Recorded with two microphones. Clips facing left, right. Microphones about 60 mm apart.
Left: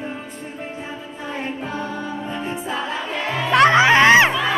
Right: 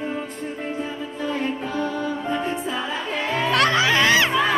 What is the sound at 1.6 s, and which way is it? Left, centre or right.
Music, left.